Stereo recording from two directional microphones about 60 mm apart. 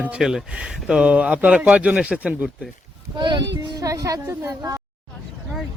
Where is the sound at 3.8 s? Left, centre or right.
Right.